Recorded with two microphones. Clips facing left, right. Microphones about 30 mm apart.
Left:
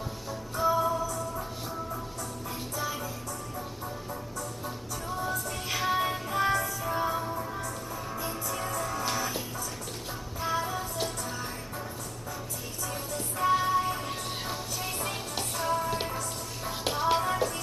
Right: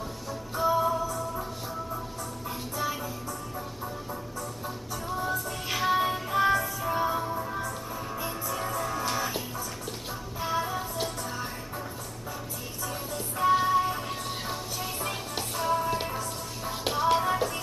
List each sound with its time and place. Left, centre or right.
0.6 s music: centre
2.7 s music: centre
7.5 s music: centre
12.9 s music: centre